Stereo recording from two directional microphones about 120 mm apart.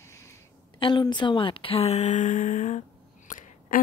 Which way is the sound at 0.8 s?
40° left (ahead or behind).